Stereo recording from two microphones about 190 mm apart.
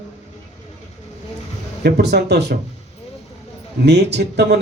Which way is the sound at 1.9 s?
60° right (ahead or behind).